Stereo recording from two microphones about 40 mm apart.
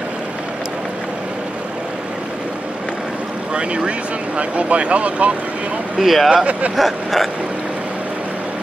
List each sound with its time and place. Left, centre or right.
3.5 s speech: right
5.9 s speech: centre